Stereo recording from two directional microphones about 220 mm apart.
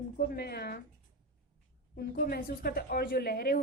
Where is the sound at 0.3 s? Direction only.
45° left (ahead or behind).